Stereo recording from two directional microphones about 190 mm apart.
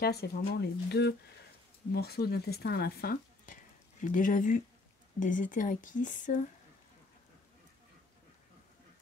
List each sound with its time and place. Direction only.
0.0 s speech: 55° left (ahead or behind); by 6.4 s 40° left (ahead or behind)